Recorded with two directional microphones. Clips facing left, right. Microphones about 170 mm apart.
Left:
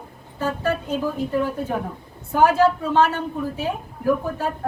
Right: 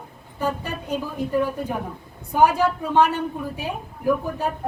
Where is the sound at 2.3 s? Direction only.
15° right (ahead or behind).